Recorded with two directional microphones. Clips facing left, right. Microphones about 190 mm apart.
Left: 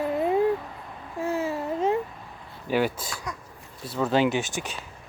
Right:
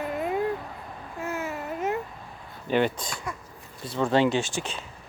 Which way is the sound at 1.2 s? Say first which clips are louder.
Left 5 dB; 30° left (ahead or behind).